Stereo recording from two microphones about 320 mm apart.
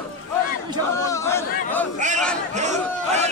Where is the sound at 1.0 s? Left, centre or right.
Centre.